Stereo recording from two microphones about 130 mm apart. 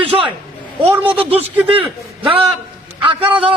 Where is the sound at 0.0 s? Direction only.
40° right (ahead or behind).